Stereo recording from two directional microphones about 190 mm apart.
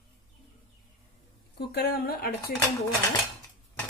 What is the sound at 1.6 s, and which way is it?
Speech, 55° left (ahead or behind).